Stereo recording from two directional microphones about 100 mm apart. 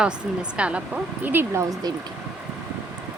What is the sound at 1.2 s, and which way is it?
Speech, 20° right (ahead or behind).